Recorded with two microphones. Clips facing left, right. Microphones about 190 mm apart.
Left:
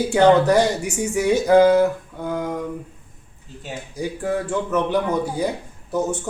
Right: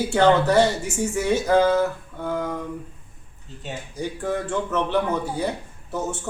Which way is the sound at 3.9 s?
10° left (ahead or behind).